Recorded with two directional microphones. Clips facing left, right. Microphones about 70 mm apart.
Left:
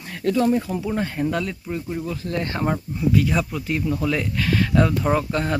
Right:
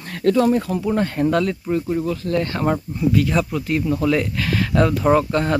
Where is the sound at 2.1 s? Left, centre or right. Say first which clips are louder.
Right 5 dB; left.